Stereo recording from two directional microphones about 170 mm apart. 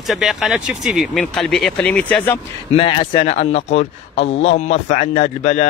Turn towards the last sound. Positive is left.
turn(degrees=45)  # may be behind; listen again after turning